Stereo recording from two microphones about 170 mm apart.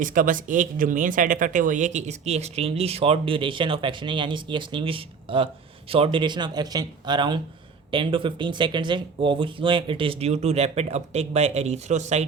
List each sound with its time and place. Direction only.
0.0 s speech: 50° right (ahead or behind)